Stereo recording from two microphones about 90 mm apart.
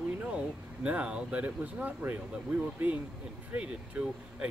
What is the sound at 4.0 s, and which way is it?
Speech, 20° right (ahead or behind).